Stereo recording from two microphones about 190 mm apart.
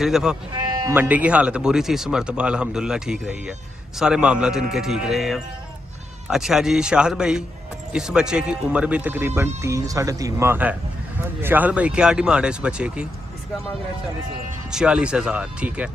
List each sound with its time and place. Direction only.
0.0 s speech: 5° right (ahead or behind)
0.6 s speech: 20° right (ahead or behind)
14.7 s speech: 5° right (ahead or behind)